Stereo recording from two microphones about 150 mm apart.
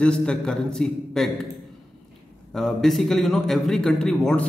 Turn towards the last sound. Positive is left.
turn(degrees=5)  # may be behind; listen again after turning